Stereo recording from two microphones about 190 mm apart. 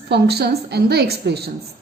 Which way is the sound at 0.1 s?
55° right (ahead or behind).